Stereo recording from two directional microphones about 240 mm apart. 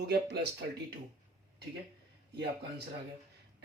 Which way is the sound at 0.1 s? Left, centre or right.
Right.